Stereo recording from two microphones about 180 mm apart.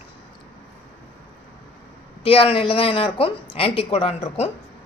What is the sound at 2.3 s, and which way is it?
Speech, 30° left (ahead or behind).